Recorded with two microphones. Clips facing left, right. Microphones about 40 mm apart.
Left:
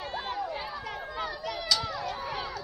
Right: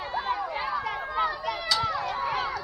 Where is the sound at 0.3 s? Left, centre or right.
Centre.